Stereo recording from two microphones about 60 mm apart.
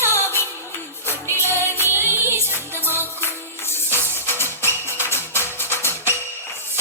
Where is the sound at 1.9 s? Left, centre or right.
Right.